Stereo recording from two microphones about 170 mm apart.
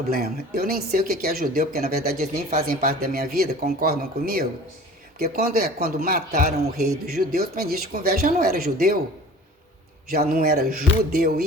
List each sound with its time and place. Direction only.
0.1 s speech: 60° right (ahead or behind)
10.1 s speech: 60° right (ahead or behind)